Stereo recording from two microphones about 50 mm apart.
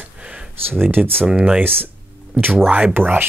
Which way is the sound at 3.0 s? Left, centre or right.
Right.